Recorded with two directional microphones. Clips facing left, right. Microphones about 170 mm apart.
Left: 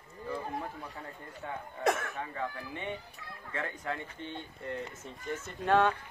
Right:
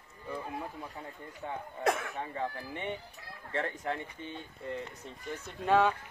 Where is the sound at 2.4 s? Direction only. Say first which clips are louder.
Right 2 dB; 20° right (ahead or behind).